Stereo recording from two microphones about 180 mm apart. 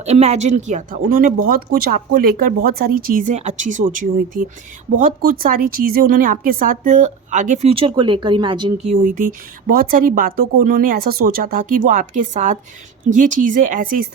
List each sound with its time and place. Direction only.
0.0 s speech: 35° right (ahead or behind)
9.0 s speech: 45° right (ahead or behind)